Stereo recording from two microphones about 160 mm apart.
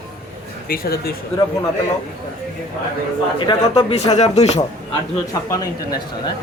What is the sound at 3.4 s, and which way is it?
Speech, 30° left (ahead or behind).